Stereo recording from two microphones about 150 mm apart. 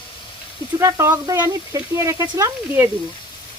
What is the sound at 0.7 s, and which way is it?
Speech, 20° right (ahead or behind).